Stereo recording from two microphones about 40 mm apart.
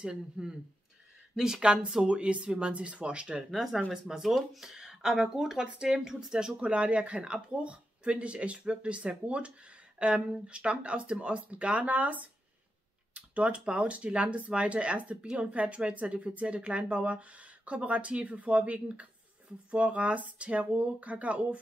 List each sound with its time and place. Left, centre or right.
0.0 s speech: right
1.6 s speech: right
3.5 s speech: centre
6.6 s speech: right